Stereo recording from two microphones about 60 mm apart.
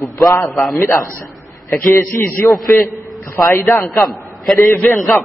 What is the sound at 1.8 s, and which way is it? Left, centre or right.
Speech, left.